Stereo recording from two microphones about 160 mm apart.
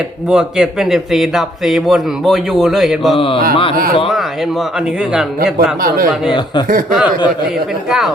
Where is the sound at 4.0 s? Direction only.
Centre (ahead or behind).